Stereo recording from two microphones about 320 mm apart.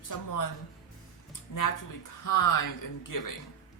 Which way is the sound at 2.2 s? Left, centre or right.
Left.